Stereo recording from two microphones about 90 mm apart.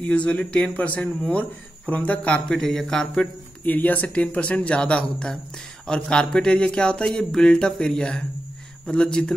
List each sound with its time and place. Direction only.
0.0 s speech: 15° left (ahead or behind)
3.6 s speech: 20° left (ahead or behind)